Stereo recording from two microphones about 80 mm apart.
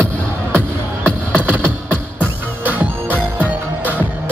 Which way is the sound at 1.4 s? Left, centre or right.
Right.